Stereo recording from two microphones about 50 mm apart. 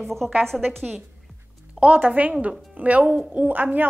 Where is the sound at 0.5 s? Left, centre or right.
Centre.